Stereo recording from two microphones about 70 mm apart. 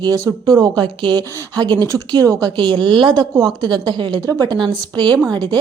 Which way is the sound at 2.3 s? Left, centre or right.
Right.